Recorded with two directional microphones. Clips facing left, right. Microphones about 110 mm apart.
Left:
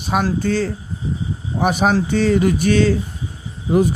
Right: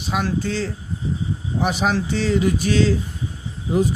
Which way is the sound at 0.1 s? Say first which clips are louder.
Left 4 dB; 45° left (ahead or behind).